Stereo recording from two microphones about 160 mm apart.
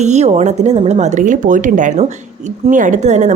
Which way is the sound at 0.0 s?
45° right (ahead or behind).